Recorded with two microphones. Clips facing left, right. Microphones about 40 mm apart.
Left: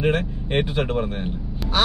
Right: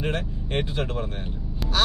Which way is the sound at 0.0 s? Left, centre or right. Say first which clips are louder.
Left 7 dB; left.